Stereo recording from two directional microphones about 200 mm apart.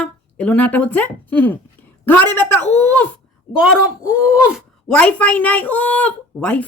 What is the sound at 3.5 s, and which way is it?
Speech, 5° right (ahead or behind).